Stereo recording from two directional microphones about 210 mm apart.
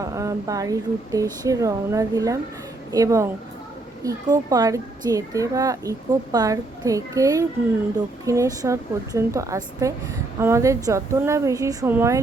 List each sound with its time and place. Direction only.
0.0 s speech: 15° right (ahead or behind)